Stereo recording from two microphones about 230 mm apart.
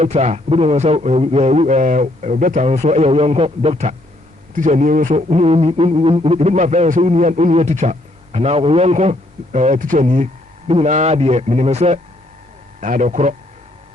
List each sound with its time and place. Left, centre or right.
0.0 s a man's voice: right